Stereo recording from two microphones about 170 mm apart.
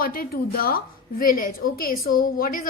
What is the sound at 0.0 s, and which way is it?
A woman's voice, 60° left (ahead or behind).